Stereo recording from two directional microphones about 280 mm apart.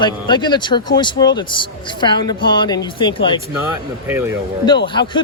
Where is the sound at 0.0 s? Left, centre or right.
Centre.